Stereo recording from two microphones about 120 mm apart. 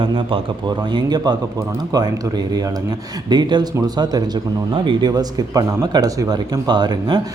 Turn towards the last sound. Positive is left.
turn(degrees=-35)  # may be behind; listen again after turning